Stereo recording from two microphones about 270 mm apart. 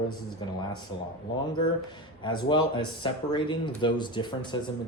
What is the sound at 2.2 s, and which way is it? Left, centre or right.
Speech, centre.